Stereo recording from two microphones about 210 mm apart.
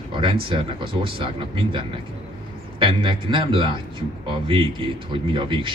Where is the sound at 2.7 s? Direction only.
25° right (ahead or behind).